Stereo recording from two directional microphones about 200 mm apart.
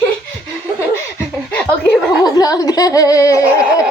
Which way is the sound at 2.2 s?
20° left (ahead or behind).